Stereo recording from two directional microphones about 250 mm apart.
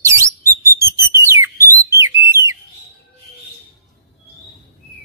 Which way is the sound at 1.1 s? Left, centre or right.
Centre.